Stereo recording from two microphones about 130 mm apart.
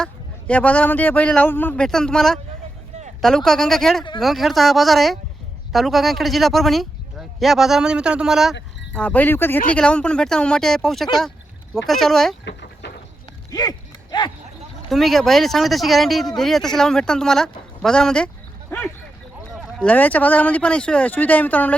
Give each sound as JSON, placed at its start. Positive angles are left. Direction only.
{"t": 0.0, "sound": "a man's voice", "side_deg": 10}
{"t": 9.0, "sound": "a man's voice", "side_deg": 10}
{"t": 13.5, "sound": "a sound", "side_deg": 30}
{"t": 14.8, "sound": "speech", "side_deg": 0}
{"t": 19.8, "sound": "a man's voice", "side_deg": 10}